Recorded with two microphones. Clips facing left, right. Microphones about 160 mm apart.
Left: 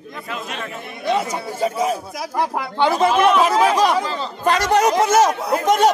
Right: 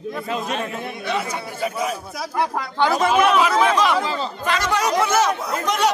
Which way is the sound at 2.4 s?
20° left (ahead or behind).